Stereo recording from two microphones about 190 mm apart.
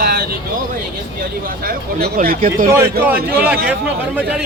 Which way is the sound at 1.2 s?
50° right (ahead or behind).